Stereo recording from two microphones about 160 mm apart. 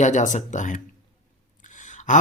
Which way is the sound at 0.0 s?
50° left (ahead or behind).